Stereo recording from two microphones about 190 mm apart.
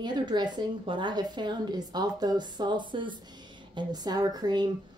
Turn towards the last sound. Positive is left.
turn(degrees=-20)  # may be behind; listen again after turning